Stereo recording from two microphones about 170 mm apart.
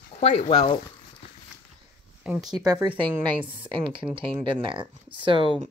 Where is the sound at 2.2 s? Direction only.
Centre (ahead or behind).